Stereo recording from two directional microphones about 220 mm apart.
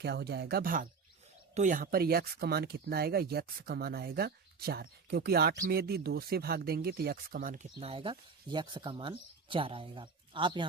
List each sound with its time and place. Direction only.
0.0 s speech: 50° right (ahead or behind); by 10.7 s 20° right (ahead or behind)